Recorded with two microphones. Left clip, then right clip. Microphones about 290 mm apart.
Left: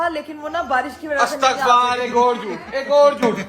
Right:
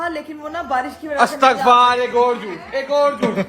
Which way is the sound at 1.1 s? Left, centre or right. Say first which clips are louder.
Right 3 dB; right.